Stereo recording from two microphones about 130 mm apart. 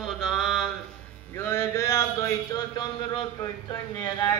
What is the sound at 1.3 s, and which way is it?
Speech, 20° left (ahead or behind).